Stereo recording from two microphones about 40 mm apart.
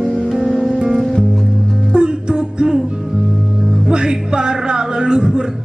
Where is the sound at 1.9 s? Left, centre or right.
Right.